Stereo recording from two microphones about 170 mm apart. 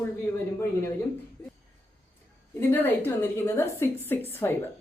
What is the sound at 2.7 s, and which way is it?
A woman's voice, 10° left (ahead or behind).